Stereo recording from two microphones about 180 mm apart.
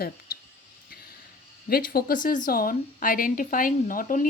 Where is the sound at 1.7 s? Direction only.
55° left (ahead or behind).